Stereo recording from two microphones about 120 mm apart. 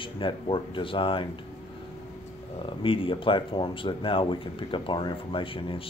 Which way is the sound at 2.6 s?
45° left (ahead or behind).